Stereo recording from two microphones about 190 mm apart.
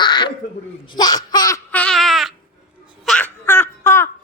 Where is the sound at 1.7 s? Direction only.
5° left (ahead or behind).